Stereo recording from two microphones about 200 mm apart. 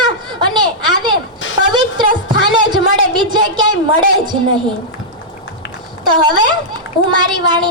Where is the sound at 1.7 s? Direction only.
20° right (ahead or behind).